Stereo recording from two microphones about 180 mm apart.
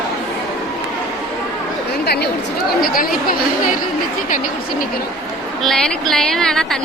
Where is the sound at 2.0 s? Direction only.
65° left (ahead or behind).